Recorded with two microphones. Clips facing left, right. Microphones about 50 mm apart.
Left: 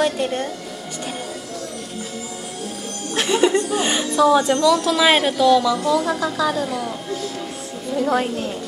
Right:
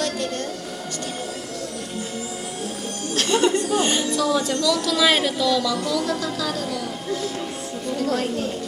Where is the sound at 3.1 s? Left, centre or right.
Centre.